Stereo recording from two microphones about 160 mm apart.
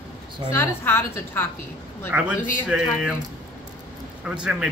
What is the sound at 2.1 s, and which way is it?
Speech, 10° right (ahead or behind).